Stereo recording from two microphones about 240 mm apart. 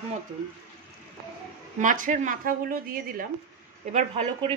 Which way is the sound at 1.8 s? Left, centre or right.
Right.